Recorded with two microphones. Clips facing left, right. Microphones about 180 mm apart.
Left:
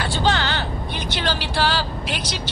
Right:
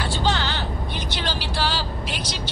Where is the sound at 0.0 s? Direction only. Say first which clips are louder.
Left 2 dB; 65° left (ahead or behind).